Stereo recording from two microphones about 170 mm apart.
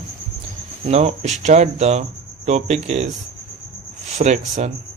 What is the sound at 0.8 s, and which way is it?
Speech, 40° right (ahead or behind).